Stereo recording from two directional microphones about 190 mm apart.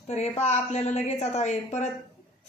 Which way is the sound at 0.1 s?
35° left (ahead or behind).